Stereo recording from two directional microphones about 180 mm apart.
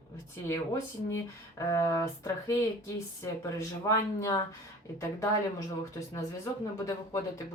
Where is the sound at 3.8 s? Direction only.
15° left (ahead or behind).